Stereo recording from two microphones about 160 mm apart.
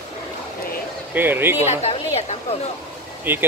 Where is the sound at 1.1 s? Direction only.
10° right (ahead or behind).